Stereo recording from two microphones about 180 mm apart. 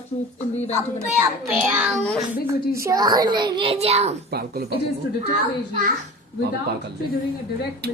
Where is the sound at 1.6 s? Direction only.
5° right (ahead or behind).